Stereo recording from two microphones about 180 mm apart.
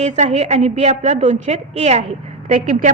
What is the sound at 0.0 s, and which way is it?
A woman's voice, 40° right (ahead or behind).